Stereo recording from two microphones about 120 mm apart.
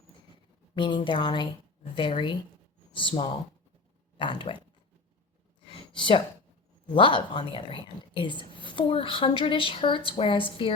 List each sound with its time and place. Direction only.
0.8 s a woman's voice: 40° left (ahead or behind)
5.6 s a sound: 45° left (ahead or behind)
6.9 s a woman's voice: 45° left (ahead or behind)